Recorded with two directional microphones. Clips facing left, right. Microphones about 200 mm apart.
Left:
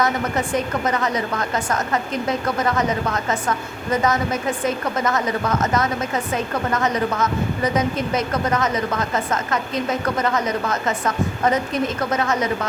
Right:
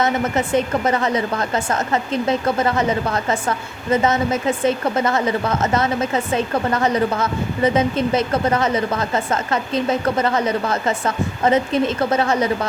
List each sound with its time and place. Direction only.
0.0 s a woman's voice: 25° right (ahead or behind)